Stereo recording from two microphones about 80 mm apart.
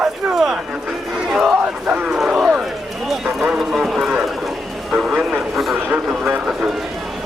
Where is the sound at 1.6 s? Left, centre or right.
Centre.